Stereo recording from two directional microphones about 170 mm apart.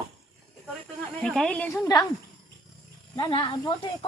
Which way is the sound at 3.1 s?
30° left (ahead or behind).